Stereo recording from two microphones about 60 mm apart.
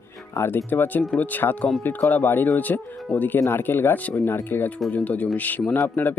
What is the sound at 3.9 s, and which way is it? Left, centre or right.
Speech, left.